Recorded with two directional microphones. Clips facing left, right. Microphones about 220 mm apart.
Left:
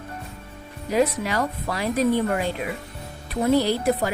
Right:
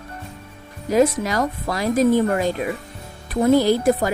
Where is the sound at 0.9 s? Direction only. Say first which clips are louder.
Right 4 dB; 45° right (ahead or behind).